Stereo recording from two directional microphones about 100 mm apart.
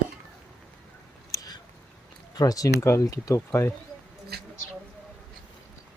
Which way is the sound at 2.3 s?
35° left (ahead or behind).